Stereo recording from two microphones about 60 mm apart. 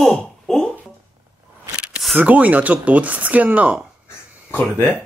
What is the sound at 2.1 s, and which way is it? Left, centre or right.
Speech, right.